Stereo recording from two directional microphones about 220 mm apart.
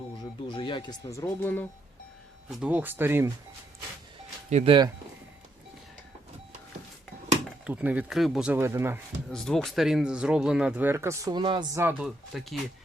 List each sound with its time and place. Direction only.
0.4 s speech: 20° left (ahead or behind)
2.5 s speech: 5° right (ahead or behind)
4.4 s speech: 30° right (ahead or behind)
7.6 s speech: 5° right (ahead or behind)
9.3 s speech: 5° left (ahead or behind); by 11.8 s 20° right (ahead or behind)
11.8 s speech: 5° right (ahead or behind)